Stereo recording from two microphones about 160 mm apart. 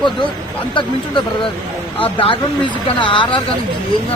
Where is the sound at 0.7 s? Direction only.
30° left (ahead or behind).